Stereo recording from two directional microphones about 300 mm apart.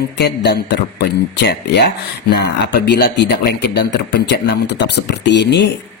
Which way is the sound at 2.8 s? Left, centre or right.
Left.